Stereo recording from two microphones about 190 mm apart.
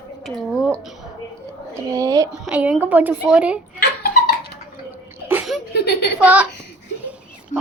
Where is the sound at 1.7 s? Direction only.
20° right (ahead or behind).